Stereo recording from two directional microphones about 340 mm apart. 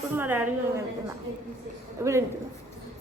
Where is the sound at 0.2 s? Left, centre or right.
Centre.